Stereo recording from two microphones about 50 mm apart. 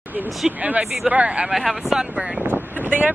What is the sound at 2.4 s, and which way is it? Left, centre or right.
Vehicle, right.